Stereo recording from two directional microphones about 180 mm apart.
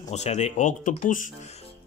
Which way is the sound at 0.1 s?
40° left (ahead or behind).